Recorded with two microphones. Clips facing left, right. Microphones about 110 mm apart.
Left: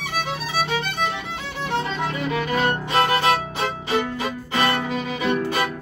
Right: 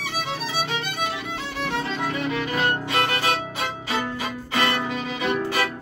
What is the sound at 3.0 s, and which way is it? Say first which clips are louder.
Music: left 8 dB; 35° left (ahead or behind).